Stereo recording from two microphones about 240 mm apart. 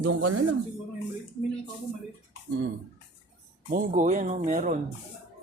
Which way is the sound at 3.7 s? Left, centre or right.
Right.